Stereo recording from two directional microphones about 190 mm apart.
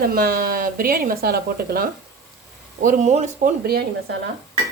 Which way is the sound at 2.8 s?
40° right (ahead or behind).